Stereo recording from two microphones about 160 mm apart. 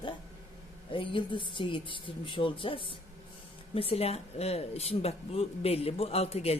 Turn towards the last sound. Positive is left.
turn(degrees=40)  # may be behind; listen again after turning